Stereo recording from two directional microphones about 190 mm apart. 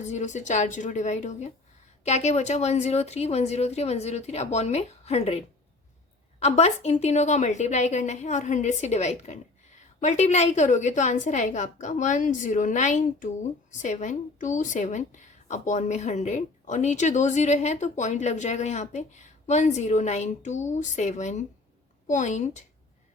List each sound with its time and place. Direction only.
0.0 s a woman's voice: 40° left (ahead or behind)
6.4 s a woman's voice: 35° left (ahead or behind)